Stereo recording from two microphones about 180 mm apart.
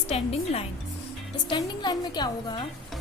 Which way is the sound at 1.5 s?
25° left (ahead or behind).